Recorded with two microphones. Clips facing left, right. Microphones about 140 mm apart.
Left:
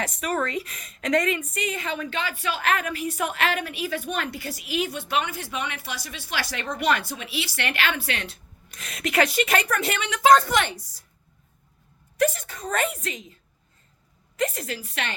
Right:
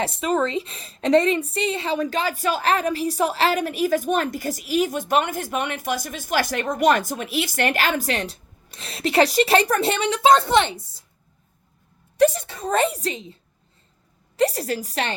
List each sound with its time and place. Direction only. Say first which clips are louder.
0.0 s a woman's voice: right 5 dB; 30° right (ahead or behind)
12.2 s a woman's voice: right 6 dB; 30° right (ahead or behind)